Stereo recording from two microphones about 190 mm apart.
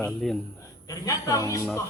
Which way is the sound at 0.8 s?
20° left (ahead or behind).